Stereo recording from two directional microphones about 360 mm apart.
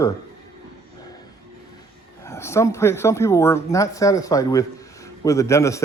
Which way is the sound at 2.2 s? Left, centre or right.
Centre.